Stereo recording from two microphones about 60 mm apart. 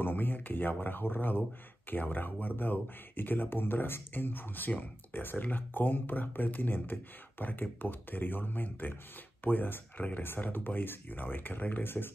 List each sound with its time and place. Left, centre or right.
0.0 s speech: left